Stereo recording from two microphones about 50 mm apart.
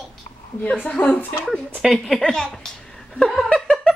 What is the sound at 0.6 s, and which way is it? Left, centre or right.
Speech, left.